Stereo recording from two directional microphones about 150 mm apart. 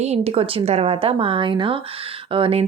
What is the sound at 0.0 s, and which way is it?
A woman's voice, 45° right (ahead or behind).